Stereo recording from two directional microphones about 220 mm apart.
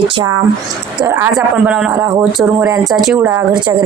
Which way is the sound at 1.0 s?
10° right (ahead or behind).